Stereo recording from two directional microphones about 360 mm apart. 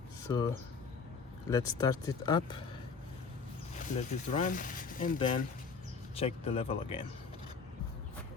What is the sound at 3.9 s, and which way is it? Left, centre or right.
Speech, centre.